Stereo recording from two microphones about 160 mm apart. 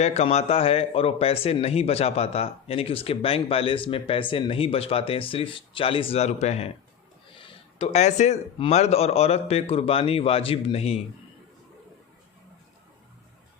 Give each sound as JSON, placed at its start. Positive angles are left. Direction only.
{"t": 0.0, "sound": "a man's voice", "side_deg": 45}